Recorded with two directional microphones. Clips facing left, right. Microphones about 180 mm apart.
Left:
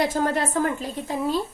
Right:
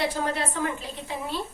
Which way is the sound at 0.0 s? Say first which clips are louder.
Left 4 dB; 45° left (ahead or behind).